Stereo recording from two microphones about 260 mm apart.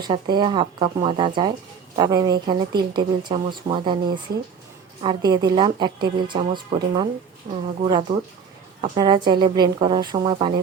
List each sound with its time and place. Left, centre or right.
0.0 s a woman's voice: centre